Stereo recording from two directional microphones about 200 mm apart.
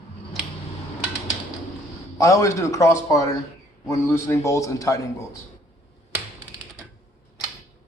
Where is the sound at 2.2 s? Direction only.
15° left (ahead or behind).